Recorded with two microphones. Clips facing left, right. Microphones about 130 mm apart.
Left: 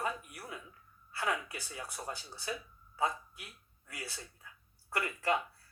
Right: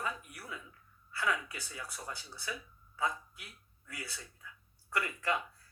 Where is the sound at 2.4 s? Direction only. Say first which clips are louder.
Left 2 dB; 40° left (ahead or behind).